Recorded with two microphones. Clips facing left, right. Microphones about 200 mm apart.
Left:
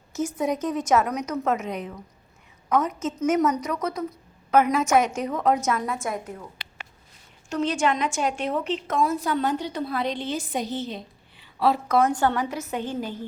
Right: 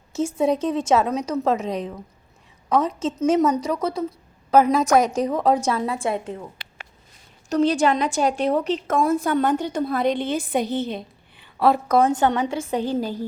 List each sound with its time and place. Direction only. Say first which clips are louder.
0.1 s a woman's voice: right 5 dB; 25° right (ahead or behind)
7.5 s a woman's voice: right 5 dB; 35° right (ahead or behind)
9.0 s a woman's voice: right 4 dB; 50° right (ahead or behind)
11.9 s a woman's voice: right 3 dB; 25° right (ahead or behind)